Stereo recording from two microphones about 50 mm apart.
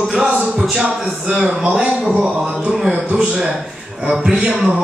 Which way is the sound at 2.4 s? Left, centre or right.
Centre.